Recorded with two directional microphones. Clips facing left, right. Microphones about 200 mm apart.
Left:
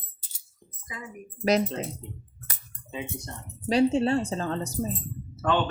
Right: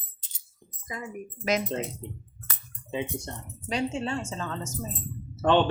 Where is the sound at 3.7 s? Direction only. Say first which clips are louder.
Left 8 dB; 35° left (ahead or behind).